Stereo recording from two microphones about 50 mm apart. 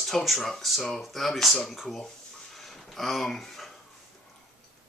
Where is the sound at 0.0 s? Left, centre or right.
Centre.